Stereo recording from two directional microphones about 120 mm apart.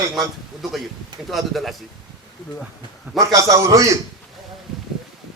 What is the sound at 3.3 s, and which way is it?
Speech, 30° right (ahead or behind).